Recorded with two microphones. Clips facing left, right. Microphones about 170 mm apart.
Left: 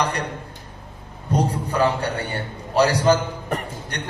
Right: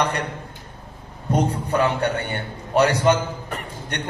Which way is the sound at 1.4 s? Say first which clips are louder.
Even; 35° left (ahead or behind).